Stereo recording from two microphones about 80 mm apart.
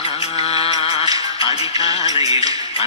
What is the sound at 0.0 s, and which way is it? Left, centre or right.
Music, right.